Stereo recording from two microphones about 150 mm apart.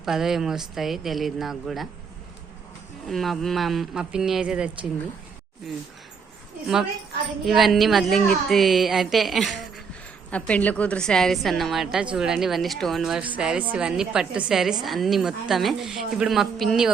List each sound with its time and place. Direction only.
0.0 s speech: centre (ahead or behind)
3.1 s speech: centre (ahead or behind)
7.4 s speech: centre (ahead or behind)